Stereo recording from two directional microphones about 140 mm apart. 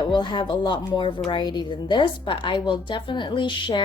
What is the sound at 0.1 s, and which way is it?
A woman's voice, 35° left (ahead or behind).